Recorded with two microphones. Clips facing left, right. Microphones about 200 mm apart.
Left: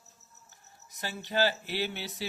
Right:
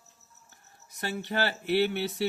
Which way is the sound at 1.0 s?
60° right (ahead or behind).